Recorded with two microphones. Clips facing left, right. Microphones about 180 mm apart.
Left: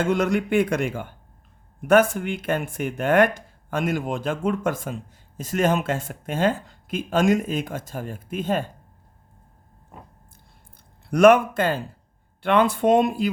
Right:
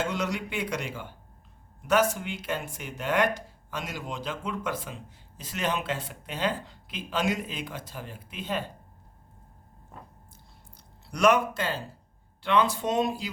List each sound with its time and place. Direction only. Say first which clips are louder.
0.0 s speech: left 8 dB; 50° left (ahead or behind)
11.0 s speech: left 8 dB; 50° left (ahead or behind)